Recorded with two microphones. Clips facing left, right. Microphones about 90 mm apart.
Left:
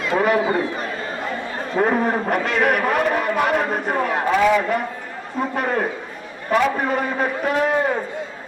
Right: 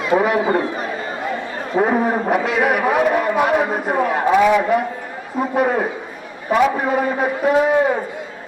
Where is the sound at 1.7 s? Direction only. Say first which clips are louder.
Right 2 dB; 5° right (ahead or behind).